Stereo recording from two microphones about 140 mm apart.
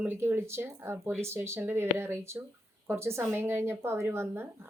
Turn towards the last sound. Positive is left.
turn(degrees=-15)  # may be behind; listen again after turning